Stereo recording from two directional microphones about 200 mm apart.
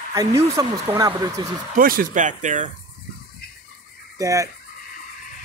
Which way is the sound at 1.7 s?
45° right (ahead or behind).